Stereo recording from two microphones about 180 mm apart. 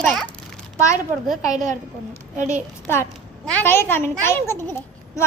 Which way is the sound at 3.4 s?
10° left (ahead or behind).